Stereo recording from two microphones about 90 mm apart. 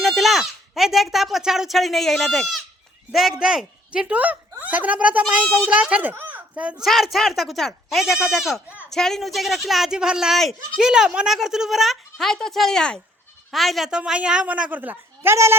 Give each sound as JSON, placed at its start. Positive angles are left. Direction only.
{"t": 0.0, "sound": "a woman's voice", "side_deg": 0}
{"t": 6.8, "sound": "a woman's voice", "side_deg": 0}